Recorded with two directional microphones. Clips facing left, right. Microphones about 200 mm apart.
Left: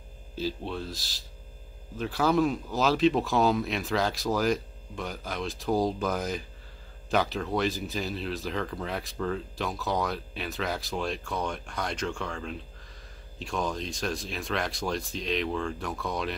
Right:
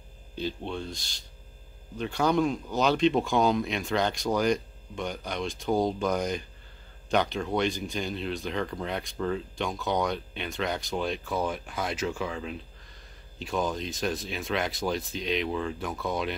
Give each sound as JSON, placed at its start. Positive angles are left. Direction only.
{"t": 0.4, "sound": "speech", "side_deg": 0}